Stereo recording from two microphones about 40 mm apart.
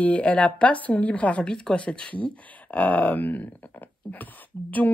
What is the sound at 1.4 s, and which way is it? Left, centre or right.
Speech, left.